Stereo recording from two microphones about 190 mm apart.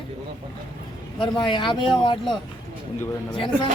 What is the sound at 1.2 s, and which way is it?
Speech, 25° left (ahead or behind).